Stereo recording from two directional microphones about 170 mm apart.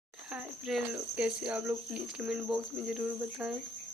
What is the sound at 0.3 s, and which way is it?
Speech, 5° right (ahead or behind).